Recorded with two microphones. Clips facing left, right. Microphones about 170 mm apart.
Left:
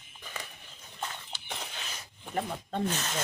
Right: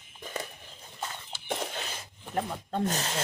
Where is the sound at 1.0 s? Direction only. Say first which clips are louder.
Even; 10° right (ahead or behind).